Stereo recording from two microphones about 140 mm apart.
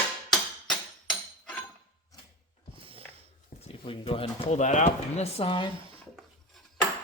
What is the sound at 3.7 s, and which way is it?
Speech, 40° left (ahead or behind).